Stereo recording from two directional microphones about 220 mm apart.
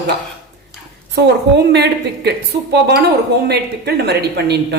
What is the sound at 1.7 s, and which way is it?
A woman's voice, 50° right (ahead or behind).